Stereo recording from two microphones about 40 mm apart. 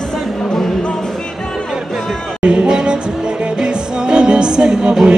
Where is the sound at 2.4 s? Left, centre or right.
Right.